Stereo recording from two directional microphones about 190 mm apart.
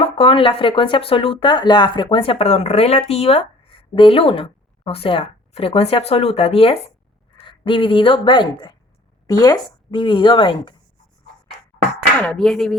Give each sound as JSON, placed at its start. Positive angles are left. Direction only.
{"t": 0.0, "sound": "speech", "side_deg": 30}
{"t": 12.2, "sound": "speech", "side_deg": 5}